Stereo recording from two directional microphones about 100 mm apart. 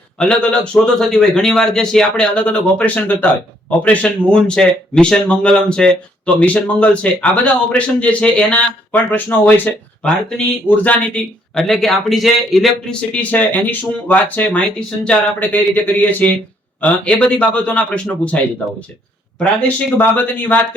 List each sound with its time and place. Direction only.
0.2 s speech: 10° left (ahead or behind)
13.0 s speech: 15° left (ahead or behind)
19.4 s speech: 15° left (ahead or behind)